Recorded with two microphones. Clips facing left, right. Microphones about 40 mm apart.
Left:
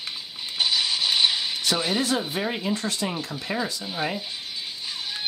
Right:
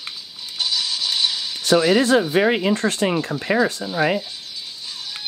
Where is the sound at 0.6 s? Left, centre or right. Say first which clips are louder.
Even; left.